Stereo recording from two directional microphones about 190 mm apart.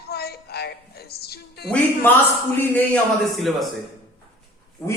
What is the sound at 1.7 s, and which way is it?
A man's voice, 10° left (ahead or behind).